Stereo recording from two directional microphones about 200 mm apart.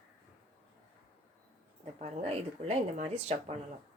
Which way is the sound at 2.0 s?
30° right (ahead or behind).